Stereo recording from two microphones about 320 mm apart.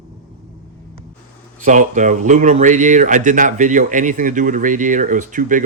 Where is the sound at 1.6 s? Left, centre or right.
Right.